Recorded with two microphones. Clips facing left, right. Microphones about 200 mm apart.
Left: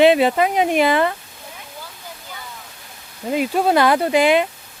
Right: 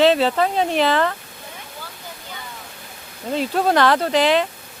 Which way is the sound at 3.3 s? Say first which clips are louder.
Left 2 dB; 10° left (ahead or behind).